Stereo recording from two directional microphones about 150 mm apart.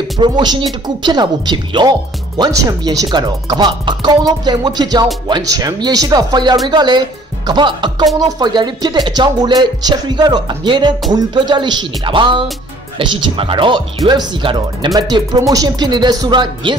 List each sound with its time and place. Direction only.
0.2 s speech: 30° right (ahead or behind)